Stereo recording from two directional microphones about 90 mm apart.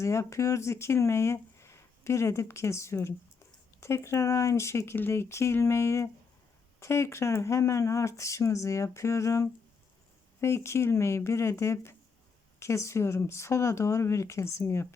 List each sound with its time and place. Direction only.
0.0 s speech: 35° left (ahead or behind)